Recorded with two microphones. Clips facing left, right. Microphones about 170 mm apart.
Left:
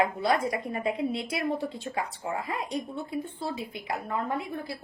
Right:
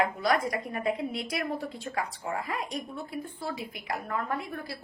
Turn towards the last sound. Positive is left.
turn(degrees=20)  # may be behind; listen again after turning